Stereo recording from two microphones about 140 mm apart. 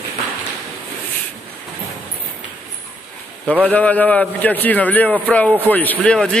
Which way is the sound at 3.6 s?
10° left (ahead or behind).